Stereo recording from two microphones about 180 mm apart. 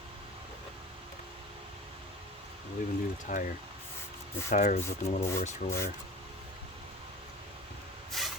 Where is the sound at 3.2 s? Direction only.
45° left (ahead or behind).